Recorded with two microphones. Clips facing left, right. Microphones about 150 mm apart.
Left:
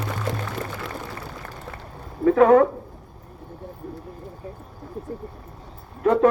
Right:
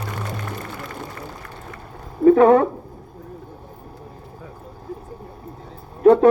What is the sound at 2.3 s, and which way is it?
Speech, 30° right (ahead or behind).